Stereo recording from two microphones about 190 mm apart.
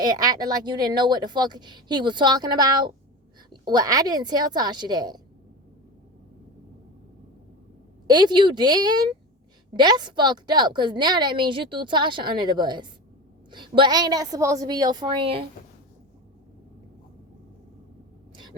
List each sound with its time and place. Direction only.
0.0 s a woman's voice: 20° right (ahead or behind)
8.0 s a woman's voice: 20° right (ahead or behind)